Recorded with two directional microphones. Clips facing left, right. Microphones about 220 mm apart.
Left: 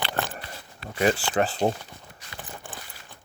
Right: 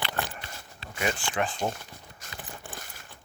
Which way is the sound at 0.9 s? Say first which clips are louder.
Left 7 dB; 40° left (ahead or behind).